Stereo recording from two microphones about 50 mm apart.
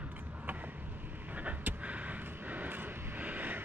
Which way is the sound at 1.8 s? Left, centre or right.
Right.